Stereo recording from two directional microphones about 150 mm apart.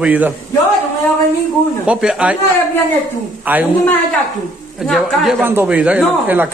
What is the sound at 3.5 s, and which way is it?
Speech, 10° right (ahead or behind).